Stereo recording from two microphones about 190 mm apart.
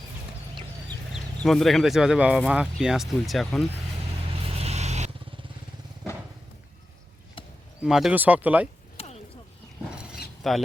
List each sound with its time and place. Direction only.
1.1 s speech: centre (ahead or behind)
4.4 s vehicle: 35° right (ahead or behind)
7.8 s speech: 5° right (ahead or behind)
9.0 s a sound: 30° left (ahead or behind)
9.9 s a sound: 5° right (ahead or behind)
10.4 s speech: centre (ahead or behind)